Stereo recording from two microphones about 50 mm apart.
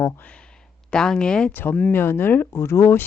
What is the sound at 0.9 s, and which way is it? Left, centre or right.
Speech, centre.